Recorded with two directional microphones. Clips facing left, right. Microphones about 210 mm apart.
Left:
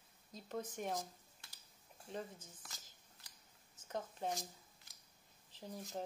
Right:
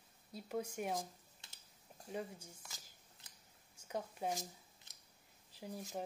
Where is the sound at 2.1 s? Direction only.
10° right (ahead or behind).